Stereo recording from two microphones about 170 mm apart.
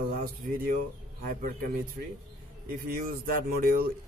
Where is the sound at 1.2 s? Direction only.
55° right (ahead or behind).